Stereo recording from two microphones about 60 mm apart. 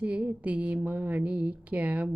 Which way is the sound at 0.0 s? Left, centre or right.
Right.